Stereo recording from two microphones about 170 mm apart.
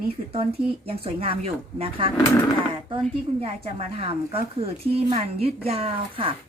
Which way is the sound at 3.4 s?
35° right (ahead or behind).